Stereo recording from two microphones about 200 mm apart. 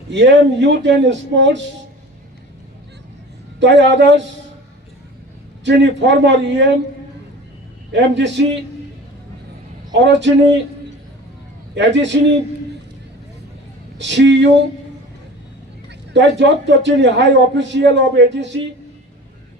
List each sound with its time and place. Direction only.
0.1 s a man's voice: 65° right (ahead or behind)
3.6 s a man's voice: 60° right (ahead or behind)
5.6 s a man's voice: 60° right (ahead or behind)
7.9 s a man's voice: 60° right (ahead or behind)
9.9 s a man's voice: 65° right (ahead or behind)
11.7 s a man's voice: 60° right (ahead or behind)
14.0 s a man's voice: 65° right (ahead or behind)
15.9 s a man's voice: 60° right (ahead or behind)